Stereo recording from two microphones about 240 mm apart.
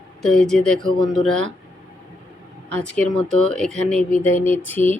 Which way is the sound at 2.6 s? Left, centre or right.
Centre.